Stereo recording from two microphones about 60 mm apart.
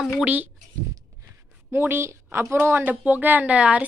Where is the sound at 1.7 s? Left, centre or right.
Right.